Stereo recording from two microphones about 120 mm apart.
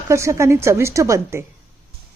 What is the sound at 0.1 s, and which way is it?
A woman's voice, 25° right (ahead or behind).